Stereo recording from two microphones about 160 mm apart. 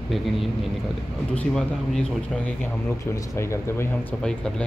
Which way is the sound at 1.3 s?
5° left (ahead or behind).